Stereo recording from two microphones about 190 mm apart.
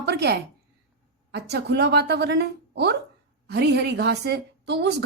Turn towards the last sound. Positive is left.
turn(degrees=-60)  # may be behind; listen again after turning